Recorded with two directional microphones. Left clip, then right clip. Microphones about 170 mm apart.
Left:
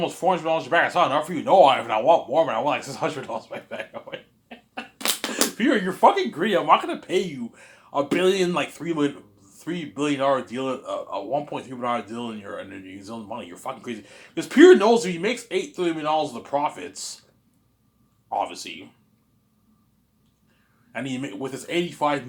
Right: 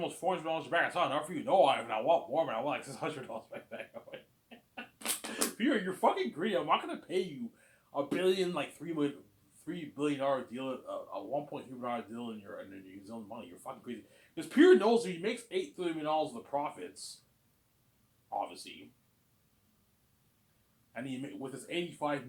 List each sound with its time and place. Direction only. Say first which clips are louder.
0.0 s speech: left 12 dB; 30° left (ahead or behind)
5.5 s speech: left 10 dB; 35° left (ahead or behind)
18.3 s speech: left 11 dB; 30° left (ahead or behind)
20.9 s speech: left 11 dB; 35° left (ahead or behind)